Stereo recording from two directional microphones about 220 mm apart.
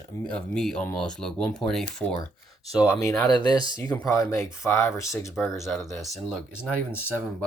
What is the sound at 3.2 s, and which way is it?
Speech, 20° left (ahead or behind).